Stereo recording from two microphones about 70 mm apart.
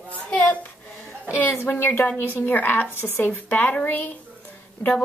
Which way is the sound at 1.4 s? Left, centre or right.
Left.